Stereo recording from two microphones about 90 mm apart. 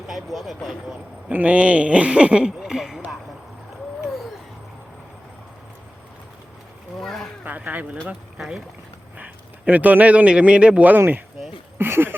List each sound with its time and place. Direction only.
0.1 s speech: centre (ahead or behind)
1.3 s speech: 15° right (ahead or behind)
7.0 s speech: 5° left (ahead or behind)
7.4 s speech: 20° right (ahead or behind)
8.4 s speech: 5° right (ahead or behind)
9.1 s a man's voice: 15° right (ahead or behind)
11.8 s a sound: 25° right (ahead or behind)